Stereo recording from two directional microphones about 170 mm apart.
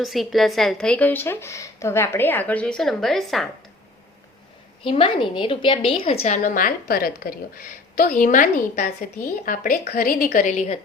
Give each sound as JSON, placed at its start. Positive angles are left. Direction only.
{"t": 0.0, "sound": "a woman's voice", "side_deg": 0}
{"t": 4.8, "sound": "a woman's voice", "side_deg": 30}